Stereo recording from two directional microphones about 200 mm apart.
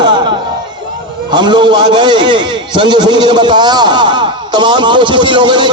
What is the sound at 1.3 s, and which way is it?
A man's voice, 20° right (ahead or behind).